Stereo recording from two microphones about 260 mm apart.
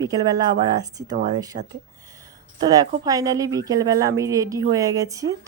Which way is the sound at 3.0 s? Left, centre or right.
Centre.